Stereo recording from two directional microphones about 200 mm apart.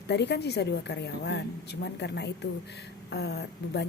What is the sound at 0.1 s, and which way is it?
A woman's voice, 55° left (ahead or behind).